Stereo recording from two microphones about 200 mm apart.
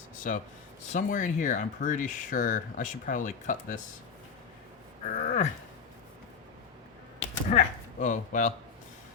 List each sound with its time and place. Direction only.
0.3 s speech: 40° left (ahead or behind)
5.0 s speech: 35° left (ahead or behind)
7.2 s speech: 40° left (ahead or behind)